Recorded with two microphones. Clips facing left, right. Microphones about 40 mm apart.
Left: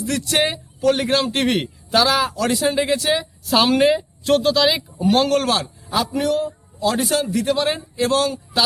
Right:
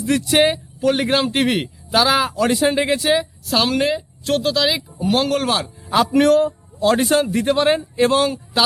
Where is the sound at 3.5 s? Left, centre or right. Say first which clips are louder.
Left 3 dB; centre.